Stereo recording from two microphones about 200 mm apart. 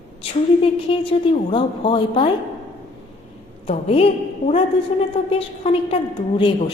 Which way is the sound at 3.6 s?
30° left (ahead or behind).